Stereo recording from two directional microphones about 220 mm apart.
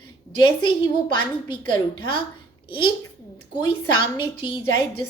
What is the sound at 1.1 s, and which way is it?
Speech, 20° left (ahead or behind).